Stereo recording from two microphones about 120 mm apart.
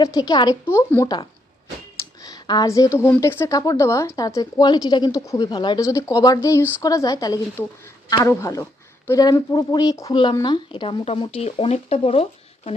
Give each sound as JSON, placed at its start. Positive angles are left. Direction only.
{"t": 0.0, "sound": "speech", "side_deg": 30}
{"t": 0.6, "sound": "speech", "side_deg": 20}
{"t": 1.0, "sound": "a woman's voice", "side_deg": 35}
{"t": 5.5, "sound": "speech", "side_deg": 40}
{"t": 5.8, "sound": "speech", "side_deg": 25}
{"t": 10.4, "sound": "speech", "side_deg": 40}